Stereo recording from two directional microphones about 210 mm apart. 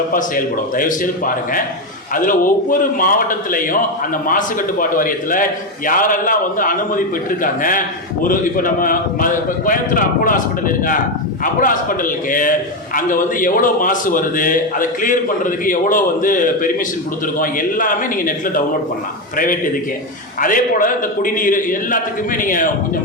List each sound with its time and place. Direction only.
0.1 s a man's voice: 40° left (ahead or behind)
20.4 s a man's voice: 40° left (ahead or behind)